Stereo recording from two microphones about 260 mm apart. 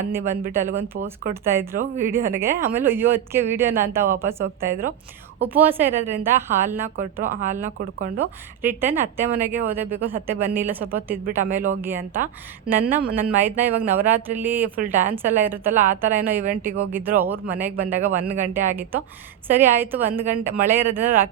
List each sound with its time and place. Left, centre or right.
0.1 s a woman's voice: centre
6.9 s speech: right
8.6 s a woman's voice: centre